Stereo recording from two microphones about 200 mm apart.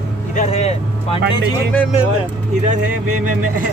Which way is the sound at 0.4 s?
35° left (ahead or behind).